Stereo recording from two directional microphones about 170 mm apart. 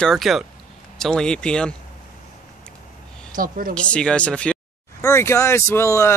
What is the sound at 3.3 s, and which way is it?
Speech, 55° right (ahead or behind).